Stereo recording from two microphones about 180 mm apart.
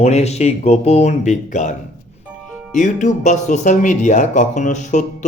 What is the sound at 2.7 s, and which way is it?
Speech, 45° left (ahead or behind).